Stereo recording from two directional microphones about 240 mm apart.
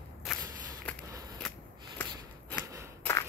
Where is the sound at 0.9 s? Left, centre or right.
Centre.